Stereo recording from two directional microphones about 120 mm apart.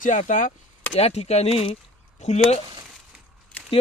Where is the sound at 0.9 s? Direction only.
60° left (ahead or behind).